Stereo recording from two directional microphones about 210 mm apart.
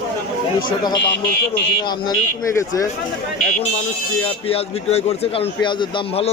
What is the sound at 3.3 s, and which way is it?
A man's voice, 35° left (ahead or behind).